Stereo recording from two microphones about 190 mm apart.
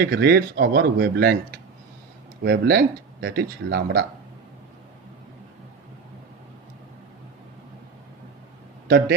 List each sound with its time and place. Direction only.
0.0 s speech: 55° right (ahead or behind)
8.9 s speech: 55° right (ahead or behind)